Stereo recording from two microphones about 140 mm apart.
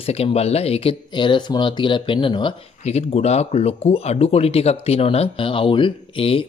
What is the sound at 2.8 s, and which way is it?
Speech, 50° left (ahead or behind).